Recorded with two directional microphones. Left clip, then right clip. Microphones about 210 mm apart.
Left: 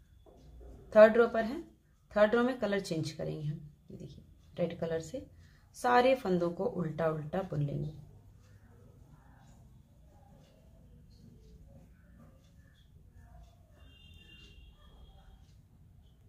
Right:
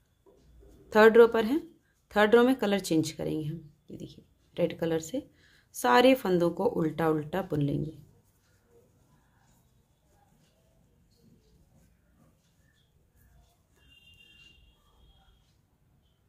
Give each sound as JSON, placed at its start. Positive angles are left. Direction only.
{"t": 0.8, "sound": "speech", "side_deg": -40}